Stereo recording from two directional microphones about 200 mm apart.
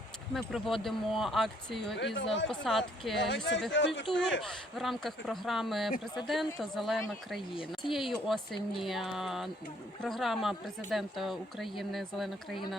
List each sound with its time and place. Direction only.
0.3 s speech: centre (ahead or behind)
2.1 s speech: 65° left (ahead or behind)
2.5 s speech: centre (ahead or behind)
3.2 s speech: 65° left (ahead or behind)
4.4 s speech: centre (ahead or behind)